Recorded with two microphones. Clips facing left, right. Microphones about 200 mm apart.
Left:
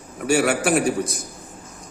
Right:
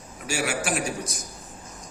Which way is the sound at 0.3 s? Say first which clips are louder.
Left 9 dB; 60° left (ahead or behind).